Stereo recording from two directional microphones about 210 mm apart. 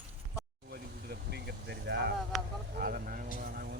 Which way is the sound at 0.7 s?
50° right (ahead or behind).